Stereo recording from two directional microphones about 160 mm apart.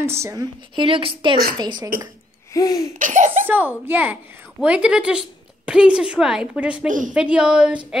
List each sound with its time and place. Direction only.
0.0 s a child's voice: 15° right (ahead or behind)
0.7 s a woman's voice: 35° right (ahead or behind)
2.5 s laughter: 25° left (ahead or behind)
3.0 s a child's voice: 50° right (ahead or behind)
3.4 s a child's voice: 10° right (ahead or behind)
6.9 s speech: 55° right (ahead or behind)
7.2 s a child's voice: 5° right (ahead or behind)